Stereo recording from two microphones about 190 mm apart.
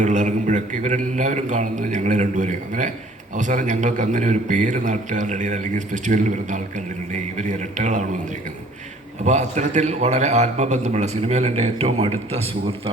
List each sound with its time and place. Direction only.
0.0 s a man's voice: 40° right (ahead or behind)
9.2 s a man's voice: 35° right (ahead or behind)